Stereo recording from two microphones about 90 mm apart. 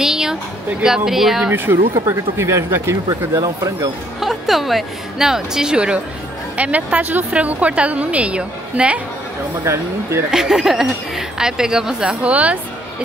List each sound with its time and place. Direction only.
0.0 s a sound: 5° right (ahead or behind)
0.8 s a woman's voice: 5° right (ahead or behind)
1.5 s speech: 25° right (ahead or behind)
3.1 s speech: 40° right (ahead or behind)
4.2 s a woman's voice: centre (ahead or behind)
10.3 s a woman's voice: 5° right (ahead or behind)